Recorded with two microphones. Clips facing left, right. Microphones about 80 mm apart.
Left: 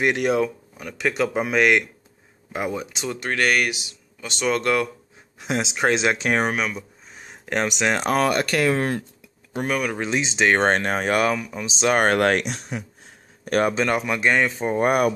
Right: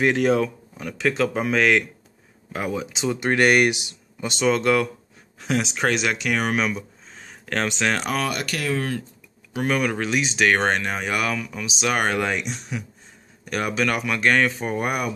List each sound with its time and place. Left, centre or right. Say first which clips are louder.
0.0 s speech: right 1 dB; centre
3.2 s speech: right 4 dB; centre
4.4 s speech: right 2 dB; centre
5.4 s speech: even; centre
6.5 s speech: right 2 dB; centre
7.2 s a sound: left 1 dB; centre
8.0 s speech: left 5 dB; left
9.6 s speech: right 1 dB; centre
9.9 s speech: even; left
11.3 s speech: left 1 dB; centre
11.6 s speech: left 4 dB; left
12.1 s speech: left 5 dB; left
13.5 s speech: left 3 dB; left; by 14.8 s centre
14.8 s speech: left 8 dB; left